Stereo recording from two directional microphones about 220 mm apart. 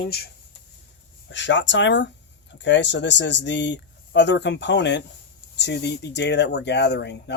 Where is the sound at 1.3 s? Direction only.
55° left (ahead or behind).